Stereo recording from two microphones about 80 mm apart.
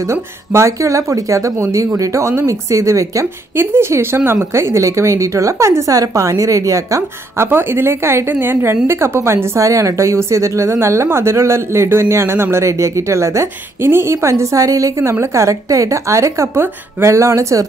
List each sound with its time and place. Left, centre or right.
0.0 s a woman's voice: right
3.5 s a woman's voice: right